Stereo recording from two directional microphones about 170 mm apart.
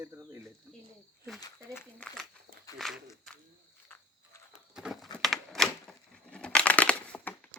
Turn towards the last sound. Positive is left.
turn(degrees=5)  # may be behind; listen again after turning